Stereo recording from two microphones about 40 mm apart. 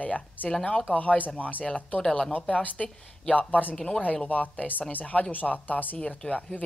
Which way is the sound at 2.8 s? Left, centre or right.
Centre.